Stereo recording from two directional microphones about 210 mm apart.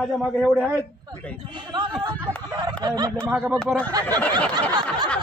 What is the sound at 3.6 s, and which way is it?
Speech, 5° left (ahead or behind).